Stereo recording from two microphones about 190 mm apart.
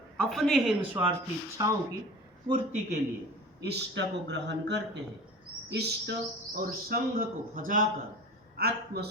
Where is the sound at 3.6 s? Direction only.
65° right (ahead or behind).